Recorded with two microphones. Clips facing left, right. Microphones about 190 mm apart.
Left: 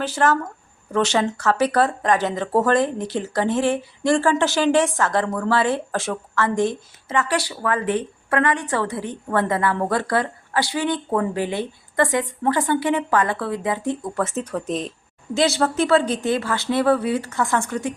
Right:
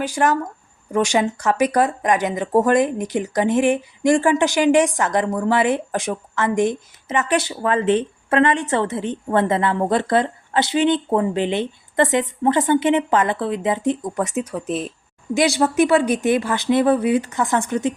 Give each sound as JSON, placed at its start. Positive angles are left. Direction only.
{"t": 0.0, "sound": "speech", "side_deg": -15}